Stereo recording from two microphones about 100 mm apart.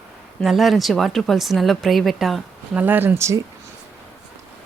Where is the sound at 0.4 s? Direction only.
Centre (ahead or behind).